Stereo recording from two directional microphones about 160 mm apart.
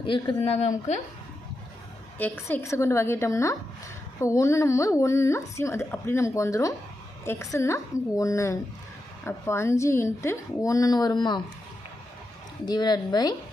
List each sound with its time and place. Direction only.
0.0 s speech: 30° left (ahead or behind)
2.1 s a woman's voice: 10° left (ahead or behind); by 11.4 s 25° left (ahead or behind)
12.6 s a woman's voice: 25° left (ahead or behind)